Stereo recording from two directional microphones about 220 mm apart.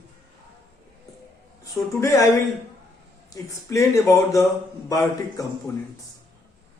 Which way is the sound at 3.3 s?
15° left (ahead or behind).